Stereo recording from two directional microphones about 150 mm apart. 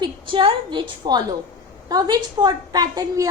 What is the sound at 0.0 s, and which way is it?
A woman's voice, 35° right (ahead or behind).